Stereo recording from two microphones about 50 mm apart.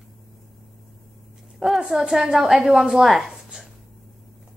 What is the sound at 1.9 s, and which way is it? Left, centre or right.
A woman's voice, centre.